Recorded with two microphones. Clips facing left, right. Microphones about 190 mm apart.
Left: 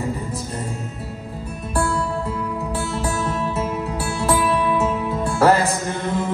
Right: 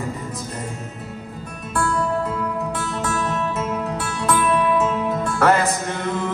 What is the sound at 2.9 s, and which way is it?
Music, 30° left (ahead or behind).